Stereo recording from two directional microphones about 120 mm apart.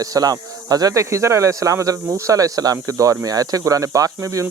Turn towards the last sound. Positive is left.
turn(degrees=-30)  # may be behind; listen again after turning